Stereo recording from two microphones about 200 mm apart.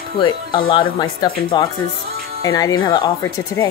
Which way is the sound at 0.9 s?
25° left (ahead or behind).